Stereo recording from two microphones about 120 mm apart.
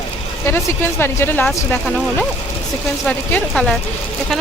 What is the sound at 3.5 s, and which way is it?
Speech, centre (ahead or behind).